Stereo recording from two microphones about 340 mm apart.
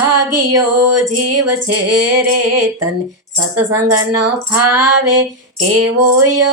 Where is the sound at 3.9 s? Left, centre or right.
Right.